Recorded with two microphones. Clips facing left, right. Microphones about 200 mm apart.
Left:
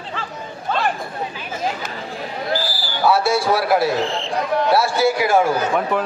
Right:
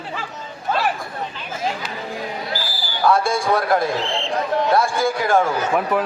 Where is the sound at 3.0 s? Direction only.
5° left (ahead or behind).